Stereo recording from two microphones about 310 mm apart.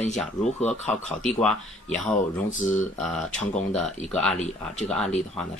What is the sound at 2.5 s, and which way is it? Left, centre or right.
Speech, left.